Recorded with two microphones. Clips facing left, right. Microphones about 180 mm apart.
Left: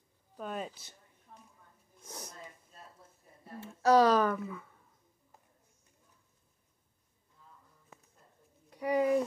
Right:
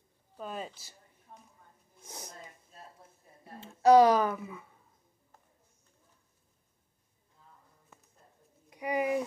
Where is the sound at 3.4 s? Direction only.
15° right (ahead or behind).